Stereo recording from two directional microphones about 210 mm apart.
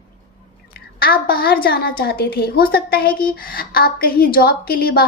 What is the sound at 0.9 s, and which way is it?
A woman's voice, 45° left (ahead or behind).